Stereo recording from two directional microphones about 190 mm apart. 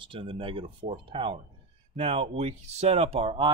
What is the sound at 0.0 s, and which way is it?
Speech, 25° right (ahead or behind).